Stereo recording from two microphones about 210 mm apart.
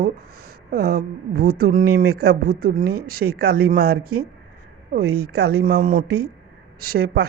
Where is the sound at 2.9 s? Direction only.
90° right.